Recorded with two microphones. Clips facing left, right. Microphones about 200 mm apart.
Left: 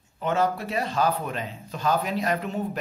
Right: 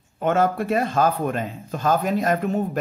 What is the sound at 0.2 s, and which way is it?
Speech, 50° right (ahead or behind).